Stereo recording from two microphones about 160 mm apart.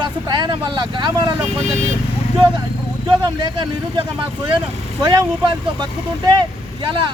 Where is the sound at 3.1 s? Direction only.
30° right (ahead or behind).